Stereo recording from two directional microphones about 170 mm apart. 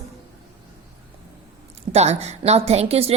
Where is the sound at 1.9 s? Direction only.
40° right (ahead or behind).